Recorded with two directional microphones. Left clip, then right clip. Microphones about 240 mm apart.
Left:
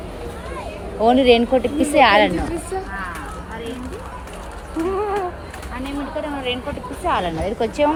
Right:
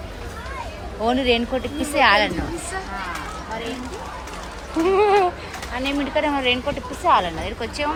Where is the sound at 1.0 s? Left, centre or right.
Centre.